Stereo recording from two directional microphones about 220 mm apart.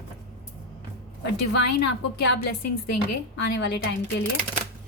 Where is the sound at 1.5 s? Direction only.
50° left (ahead or behind).